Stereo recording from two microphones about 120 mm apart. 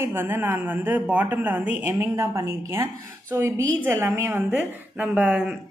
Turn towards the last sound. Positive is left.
turn(degrees=-10)  # may be behind; listen again after turning